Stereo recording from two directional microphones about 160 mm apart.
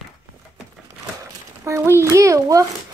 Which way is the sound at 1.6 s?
15° right (ahead or behind).